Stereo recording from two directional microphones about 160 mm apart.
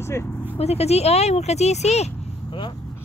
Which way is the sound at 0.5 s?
40° left (ahead or behind).